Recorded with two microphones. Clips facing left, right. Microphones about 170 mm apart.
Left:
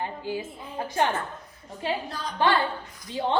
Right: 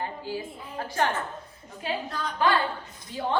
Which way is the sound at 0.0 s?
20° left (ahead or behind).